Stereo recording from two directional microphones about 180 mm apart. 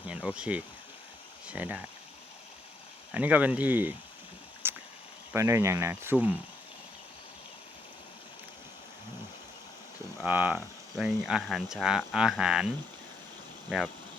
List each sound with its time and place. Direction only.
0.0 s speech: 5° right (ahead or behind)
3.1 s speech: 10° right (ahead or behind)
4.6 s a sound: 10° right (ahead or behind)
5.3 s speech: 15° right (ahead or behind)
10.2 s speech: 10° right (ahead or behind)